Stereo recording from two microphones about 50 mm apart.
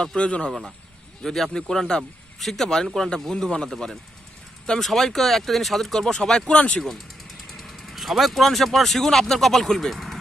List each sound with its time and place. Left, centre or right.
0.0 s speech: centre
1.2 s speech: centre
7.5 s speech: centre